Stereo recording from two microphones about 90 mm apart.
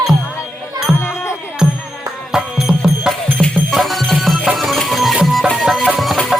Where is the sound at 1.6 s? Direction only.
5° right (ahead or behind).